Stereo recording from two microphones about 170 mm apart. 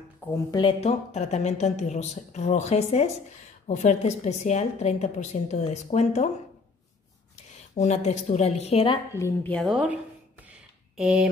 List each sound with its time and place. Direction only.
0.5 s speech: 25° left (ahead or behind)
0.7 s a woman's voice: 40° left (ahead or behind)
7.7 s a woman's voice: 40° left (ahead or behind)
9.1 s speech: 15° left (ahead or behind); by 9.9 s centre (ahead or behind)
11.0 s speech: 5° right (ahead or behind)